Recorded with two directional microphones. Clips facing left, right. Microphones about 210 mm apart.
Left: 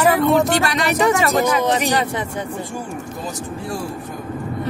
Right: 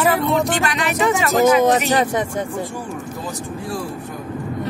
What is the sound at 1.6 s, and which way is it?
Speech, 45° right (ahead or behind).